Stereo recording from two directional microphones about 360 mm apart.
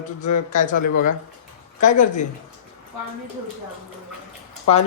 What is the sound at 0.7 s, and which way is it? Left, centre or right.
Speech, left.